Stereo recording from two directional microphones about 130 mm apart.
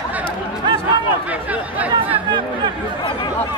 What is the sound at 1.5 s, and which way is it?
Chatter, 10° right (ahead or behind).